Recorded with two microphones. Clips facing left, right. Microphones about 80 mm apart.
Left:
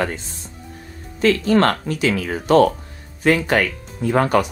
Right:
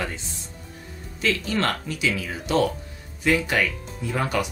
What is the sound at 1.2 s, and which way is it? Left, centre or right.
Speech, left.